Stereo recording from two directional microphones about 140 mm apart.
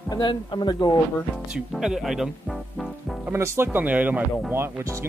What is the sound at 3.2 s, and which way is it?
Speech, 20° right (ahead or behind).